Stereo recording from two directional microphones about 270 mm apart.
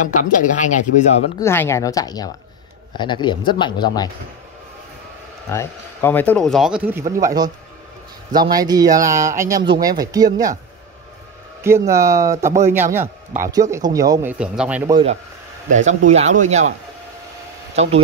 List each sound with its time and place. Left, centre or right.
0.0 s speech: left
1.4 s speech: centre
5.5 s speech: centre
8.5 s speech: centre
11.6 s speech: centre
15.7 s speech: right
17.8 s speech: right